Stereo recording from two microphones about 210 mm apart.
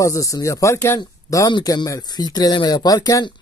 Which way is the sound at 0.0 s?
15° left (ahead or behind).